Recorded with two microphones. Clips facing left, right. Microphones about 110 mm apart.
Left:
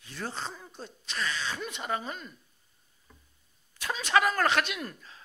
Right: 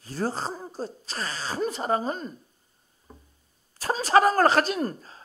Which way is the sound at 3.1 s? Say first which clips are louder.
Right 10 dB; 40° right (ahead or behind).